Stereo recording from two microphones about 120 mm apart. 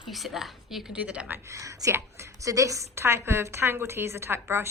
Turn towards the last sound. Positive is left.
turn(degrees=-20)  # may be behind; listen again after turning